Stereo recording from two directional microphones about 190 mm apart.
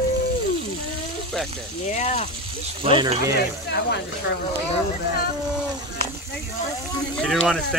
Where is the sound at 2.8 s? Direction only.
25° right (ahead or behind).